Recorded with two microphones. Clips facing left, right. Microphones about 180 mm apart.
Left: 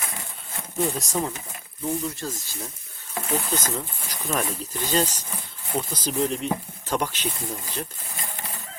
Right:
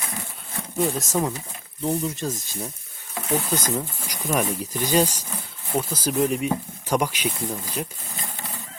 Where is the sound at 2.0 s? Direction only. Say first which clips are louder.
Right 3 dB; 20° right (ahead or behind).